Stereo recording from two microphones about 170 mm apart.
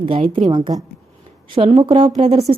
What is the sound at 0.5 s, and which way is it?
A woman's voice, 25° right (ahead or behind).